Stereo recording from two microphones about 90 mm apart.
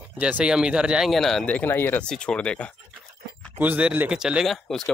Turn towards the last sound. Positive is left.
turn(degrees=5)  # may be behind; listen again after turning